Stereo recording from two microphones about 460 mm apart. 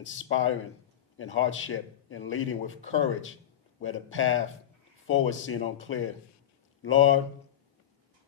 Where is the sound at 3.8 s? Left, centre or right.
Left.